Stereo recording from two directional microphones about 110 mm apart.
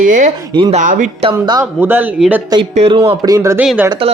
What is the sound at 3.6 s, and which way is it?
Speech, 10° right (ahead or behind).